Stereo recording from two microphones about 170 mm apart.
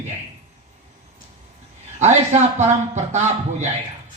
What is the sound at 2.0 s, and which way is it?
A man's voice, 40° right (ahead or behind).